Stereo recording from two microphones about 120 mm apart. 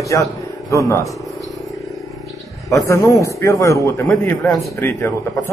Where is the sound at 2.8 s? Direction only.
25° left (ahead or behind).